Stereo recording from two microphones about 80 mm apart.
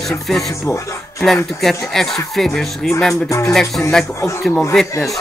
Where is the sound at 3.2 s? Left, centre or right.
Left.